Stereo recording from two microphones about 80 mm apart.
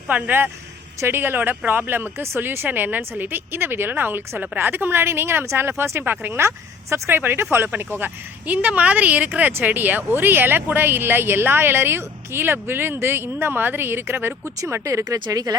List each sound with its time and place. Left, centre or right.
0.1 s speech: right